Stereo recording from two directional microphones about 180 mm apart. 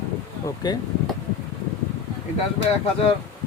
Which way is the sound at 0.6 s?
25° left (ahead or behind).